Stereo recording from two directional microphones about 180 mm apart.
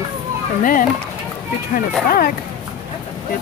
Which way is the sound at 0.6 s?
50° left (ahead or behind).